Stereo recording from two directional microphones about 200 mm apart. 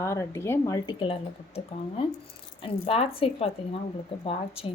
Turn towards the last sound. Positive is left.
turn(degrees=30)  # may be behind; listen again after turning